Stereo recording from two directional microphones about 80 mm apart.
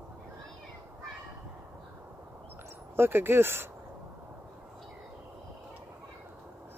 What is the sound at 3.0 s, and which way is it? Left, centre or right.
Speech, right.